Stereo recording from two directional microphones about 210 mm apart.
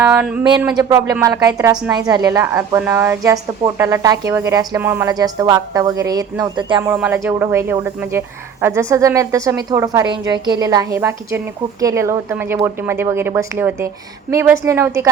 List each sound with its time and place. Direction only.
0.0 s a woman's voice: 5° right (ahead or behind)
6.9 s a woman's voice: 10° right (ahead or behind)